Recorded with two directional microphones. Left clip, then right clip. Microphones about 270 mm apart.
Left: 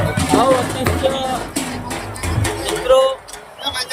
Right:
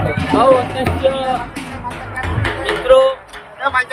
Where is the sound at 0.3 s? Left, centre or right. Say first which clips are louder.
Right 4 dB; centre.